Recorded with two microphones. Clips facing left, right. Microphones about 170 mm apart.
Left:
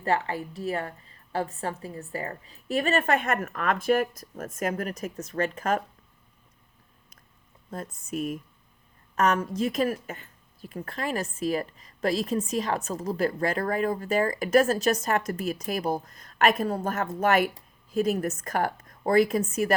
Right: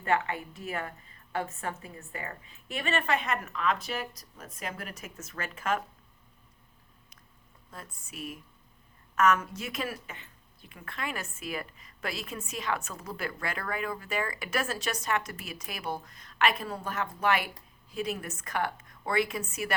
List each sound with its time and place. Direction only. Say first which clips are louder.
0.0 s a woman's voice: left 2 dB; 35° left (ahead or behind)
8.1 s a woman's voice: left 10 dB; 45° left (ahead or behind)